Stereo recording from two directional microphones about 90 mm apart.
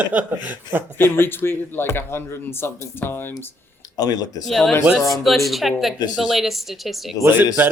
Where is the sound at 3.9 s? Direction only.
45° left (ahead or behind).